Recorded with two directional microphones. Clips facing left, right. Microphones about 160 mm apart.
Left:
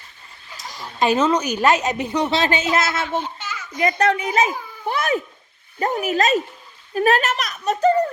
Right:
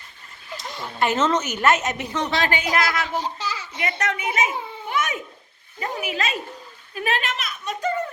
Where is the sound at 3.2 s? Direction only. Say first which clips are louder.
Even; 35° right (ahead or behind).